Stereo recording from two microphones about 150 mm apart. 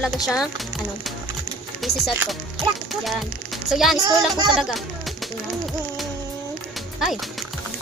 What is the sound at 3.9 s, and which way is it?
Speech, 25° right (ahead or behind).